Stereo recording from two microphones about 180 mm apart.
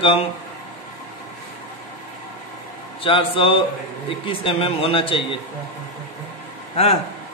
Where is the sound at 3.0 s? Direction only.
30° left (ahead or behind).